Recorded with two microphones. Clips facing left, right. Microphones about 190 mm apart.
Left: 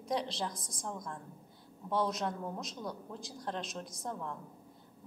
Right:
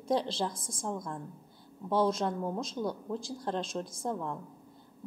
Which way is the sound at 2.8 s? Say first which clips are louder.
Right 8 dB; 30° right (ahead or behind).